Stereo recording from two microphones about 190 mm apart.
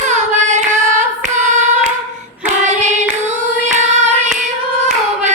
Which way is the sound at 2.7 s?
40° right (ahead or behind).